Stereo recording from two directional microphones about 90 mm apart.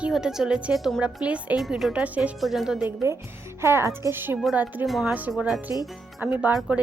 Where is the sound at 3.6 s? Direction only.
30° right (ahead or behind).